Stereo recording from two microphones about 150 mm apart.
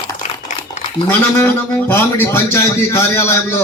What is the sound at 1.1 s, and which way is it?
A man's voice, 15° left (ahead or behind).